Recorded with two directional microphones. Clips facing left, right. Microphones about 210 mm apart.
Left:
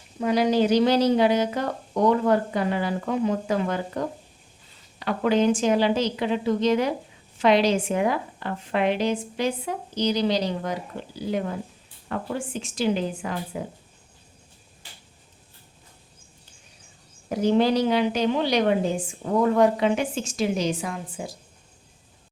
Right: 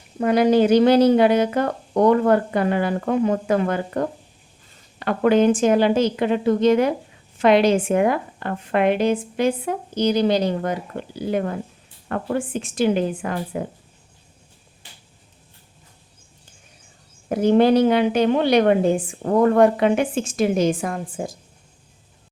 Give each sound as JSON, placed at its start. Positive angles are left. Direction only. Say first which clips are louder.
{"t": 0.2, "sound": "a woman's voice", "louder": "right 5 dB", "side_deg": -55}
{"t": 17.2, "sound": "a woman's voice", "louder": "right 5 dB", "side_deg": -55}